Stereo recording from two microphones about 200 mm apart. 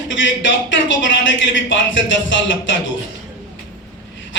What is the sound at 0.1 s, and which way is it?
A man's voice, 70° left (ahead or behind).